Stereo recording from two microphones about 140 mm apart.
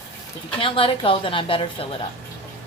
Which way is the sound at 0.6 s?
40° left (ahead or behind).